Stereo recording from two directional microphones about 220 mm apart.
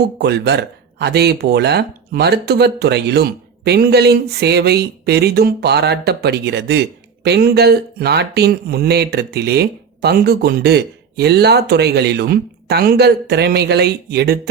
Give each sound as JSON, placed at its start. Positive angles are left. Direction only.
{"t": 0.2, "sound": "speech", "side_deg": -50}